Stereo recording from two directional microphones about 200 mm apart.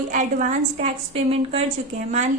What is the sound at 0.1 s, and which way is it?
A woman's voice, 40° right (ahead or behind).